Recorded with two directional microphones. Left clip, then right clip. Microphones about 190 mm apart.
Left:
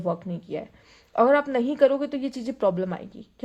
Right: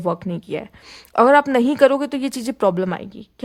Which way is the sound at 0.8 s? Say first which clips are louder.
Right 6 dB; 45° right (ahead or behind).